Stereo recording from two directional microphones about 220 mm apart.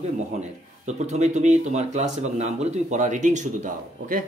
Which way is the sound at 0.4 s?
30° right (ahead or behind).